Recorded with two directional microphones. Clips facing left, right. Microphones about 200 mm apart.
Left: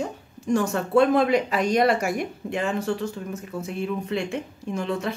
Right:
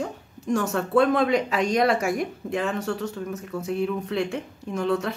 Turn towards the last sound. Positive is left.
turn(degrees=0)  # may be behind; listen again after turning